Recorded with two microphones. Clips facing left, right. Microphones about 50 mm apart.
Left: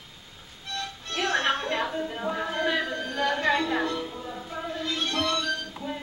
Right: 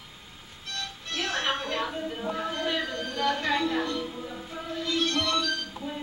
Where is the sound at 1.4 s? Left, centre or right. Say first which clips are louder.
Left 3 dB; centre.